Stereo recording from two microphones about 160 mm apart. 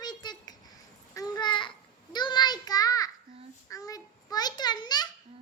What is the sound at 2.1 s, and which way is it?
Child singing, 25° left (ahead or behind).